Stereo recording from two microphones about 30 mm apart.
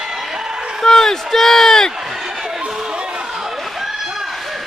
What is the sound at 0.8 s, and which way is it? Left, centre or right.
A man's voice, centre.